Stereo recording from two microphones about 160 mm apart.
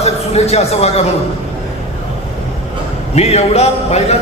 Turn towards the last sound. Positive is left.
turn(degrees=40)  # may be behind; listen again after turning